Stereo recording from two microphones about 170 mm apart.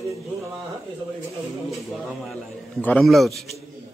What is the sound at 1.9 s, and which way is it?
A man's voice, centre (ahead or behind).